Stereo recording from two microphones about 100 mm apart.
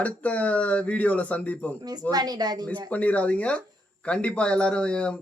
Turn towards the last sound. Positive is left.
turn(degrees=10)  # may be behind; listen again after turning